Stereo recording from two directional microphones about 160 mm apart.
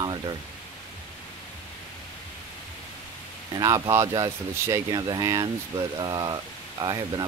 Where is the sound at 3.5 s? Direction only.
25° right (ahead or behind).